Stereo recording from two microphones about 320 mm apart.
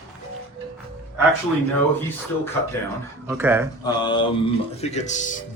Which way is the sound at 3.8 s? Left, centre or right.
Centre.